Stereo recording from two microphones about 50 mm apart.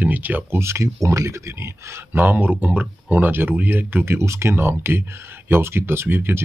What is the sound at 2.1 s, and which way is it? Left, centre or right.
Speech, right.